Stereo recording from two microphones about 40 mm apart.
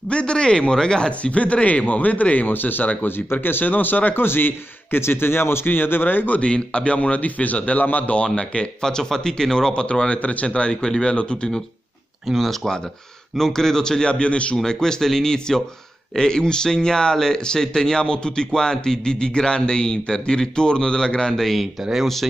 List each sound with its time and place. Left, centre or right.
0.1 s speech: left
1.3 s a man's voice: left
2.5 s a man's voice: left
4.2 s a man's voice: left
6.4 s a man's voice: left
8.2 s speech: left
8.8 s a man's voice: centre
9.8 s speech: left
12.4 s a man's voice: centre; by 14.6 s left
14.6 s a man's voice: centre
21.4 s a man's voice: centre